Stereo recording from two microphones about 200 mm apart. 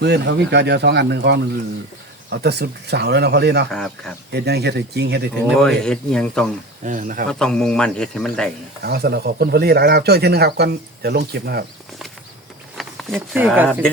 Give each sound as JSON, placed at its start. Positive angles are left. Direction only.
{"t": 0.0, "sound": "speech", "side_deg": -55}
{"t": 3.7, "sound": "speech", "side_deg": 0}
{"t": 4.3, "sound": "speech", "side_deg": -55}
{"t": 5.5, "sound": "speech", "side_deg": 5}
{"t": 6.8, "sound": "speech", "side_deg": -40}
{"t": 7.3, "sound": "speech", "side_deg": 5}
{"t": 8.8, "sound": "speech", "side_deg": -50}
{"t": 12.7, "sound": "a sound", "side_deg": 0}
{"t": 13.1, "sound": "speech", "side_deg": -10}